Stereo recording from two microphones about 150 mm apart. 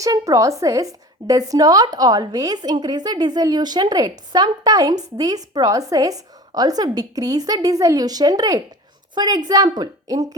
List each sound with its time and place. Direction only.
0.0 s a woman's voice: 20° right (ahead or behind)